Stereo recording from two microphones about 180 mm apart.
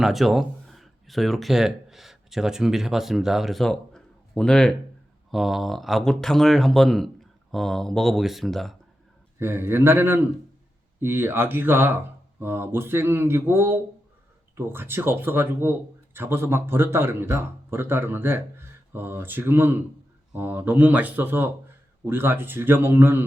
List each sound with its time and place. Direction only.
0.0 s speech: centre (ahead or behind)
9.4 s a man's voice: 15° right (ahead or behind)